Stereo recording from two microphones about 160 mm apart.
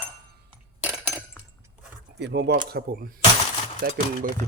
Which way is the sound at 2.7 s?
70° right (ahead or behind).